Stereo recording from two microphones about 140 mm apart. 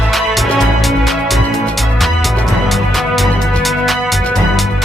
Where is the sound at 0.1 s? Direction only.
Centre (ahead or behind).